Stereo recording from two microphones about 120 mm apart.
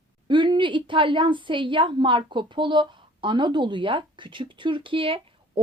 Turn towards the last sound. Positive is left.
turn(degrees=-50)  # may be behind; listen again after turning